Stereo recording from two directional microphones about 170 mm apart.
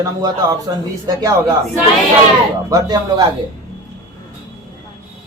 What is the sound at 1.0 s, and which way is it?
Speech, 20° right (ahead or behind).